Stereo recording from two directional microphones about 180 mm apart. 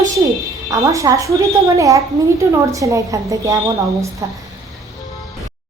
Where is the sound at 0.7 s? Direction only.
20° right (ahead or behind).